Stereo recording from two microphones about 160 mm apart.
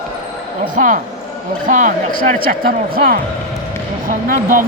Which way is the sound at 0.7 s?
55° right (ahead or behind).